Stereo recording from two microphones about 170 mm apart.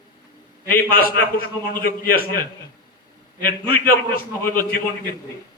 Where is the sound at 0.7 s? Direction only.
60° left (ahead or behind).